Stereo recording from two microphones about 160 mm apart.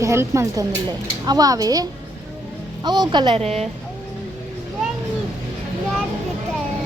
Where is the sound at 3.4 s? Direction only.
40° right (ahead or behind).